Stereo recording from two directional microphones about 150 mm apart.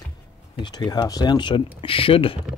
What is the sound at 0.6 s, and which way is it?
Speech, 30° left (ahead or behind).